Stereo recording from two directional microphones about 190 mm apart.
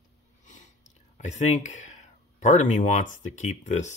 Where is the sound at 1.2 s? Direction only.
35° left (ahead or behind).